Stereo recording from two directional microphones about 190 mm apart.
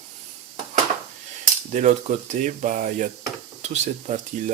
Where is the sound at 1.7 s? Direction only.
40° right (ahead or behind).